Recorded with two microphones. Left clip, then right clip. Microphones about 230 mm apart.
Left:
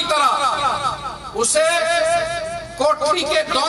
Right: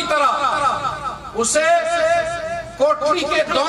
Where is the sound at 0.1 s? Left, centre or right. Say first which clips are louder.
Even; left.